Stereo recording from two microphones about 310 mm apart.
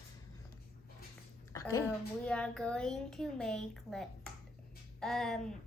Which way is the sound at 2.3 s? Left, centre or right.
Centre.